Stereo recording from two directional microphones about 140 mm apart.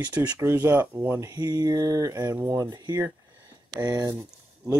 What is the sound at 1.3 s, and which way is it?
Speech, 30° right (ahead or behind).